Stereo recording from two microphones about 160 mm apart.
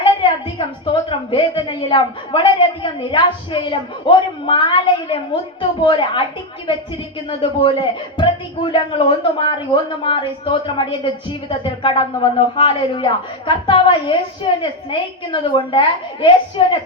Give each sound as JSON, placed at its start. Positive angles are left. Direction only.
{"t": 0.0, "sound": "a sound", "side_deg": 30}
{"t": 0.9, "sound": "a woman's voice", "side_deg": 30}
{"t": 7.3, "sound": "a woman's voice", "side_deg": 30}